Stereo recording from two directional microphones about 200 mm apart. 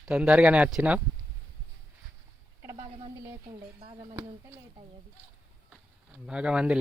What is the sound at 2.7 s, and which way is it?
Radio, 30° right (ahead or behind).